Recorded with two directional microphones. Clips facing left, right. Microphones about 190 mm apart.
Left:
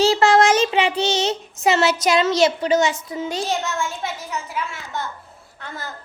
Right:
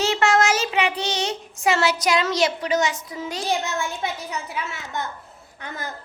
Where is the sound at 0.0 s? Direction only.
30° left (ahead or behind).